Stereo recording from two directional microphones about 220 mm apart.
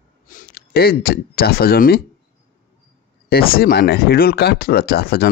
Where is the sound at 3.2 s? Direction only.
45° left (ahead or behind).